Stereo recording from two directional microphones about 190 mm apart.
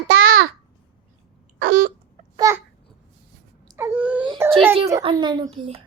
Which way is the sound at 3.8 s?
10° right (ahead or behind).